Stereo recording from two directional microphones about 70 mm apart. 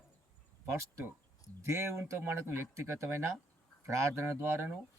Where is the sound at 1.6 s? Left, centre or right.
Right.